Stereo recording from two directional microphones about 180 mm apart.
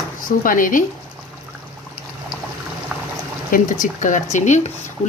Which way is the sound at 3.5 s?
45° left (ahead or behind).